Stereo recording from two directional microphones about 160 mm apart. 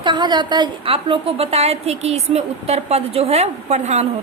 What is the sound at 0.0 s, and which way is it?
A woman's voice, 30° right (ahead or behind).